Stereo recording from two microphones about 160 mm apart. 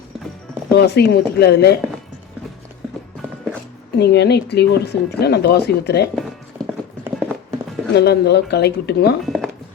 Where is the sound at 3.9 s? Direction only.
90° left.